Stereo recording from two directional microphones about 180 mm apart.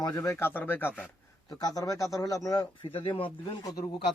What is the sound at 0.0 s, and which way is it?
Speech, 20° left (ahead or behind).